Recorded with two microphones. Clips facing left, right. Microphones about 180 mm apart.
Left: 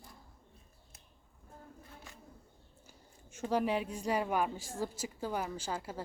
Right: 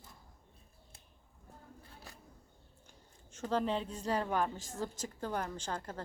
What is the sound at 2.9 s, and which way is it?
Speech, 10° left (ahead or behind).